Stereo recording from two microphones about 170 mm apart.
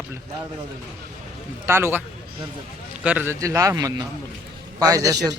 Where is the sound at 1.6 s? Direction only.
15° right (ahead or behind).